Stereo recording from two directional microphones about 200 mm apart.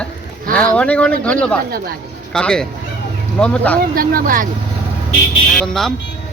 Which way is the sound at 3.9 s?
45° right (ahead or behind).